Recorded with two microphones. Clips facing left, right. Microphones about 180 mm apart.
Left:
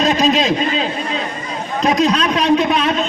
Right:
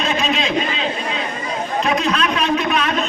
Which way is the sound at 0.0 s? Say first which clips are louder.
Left 6 dB; 40° left (ahead or behind).